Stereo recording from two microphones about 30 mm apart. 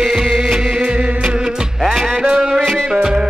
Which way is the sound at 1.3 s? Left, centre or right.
Right.